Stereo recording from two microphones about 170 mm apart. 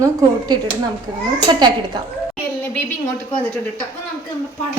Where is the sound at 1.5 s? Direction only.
25° right (ahead or behind).